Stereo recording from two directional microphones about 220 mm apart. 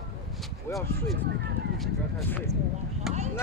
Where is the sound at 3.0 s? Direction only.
Centre (ahead or behind).